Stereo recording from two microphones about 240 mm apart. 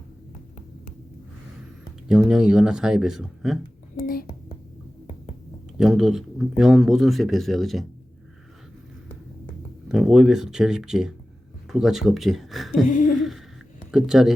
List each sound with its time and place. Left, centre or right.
2.0 s speech: centre
3.9 s a sound: left
5.7 s speech: centre
9.9 s speech: centre
12.8 s a sound: left
13.1 s speech: centre